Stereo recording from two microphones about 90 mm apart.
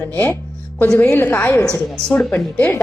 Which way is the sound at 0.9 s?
25° left (ahead or behind).